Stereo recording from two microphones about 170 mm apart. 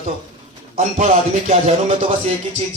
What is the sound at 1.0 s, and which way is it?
Music, 40° right (ahead or behind).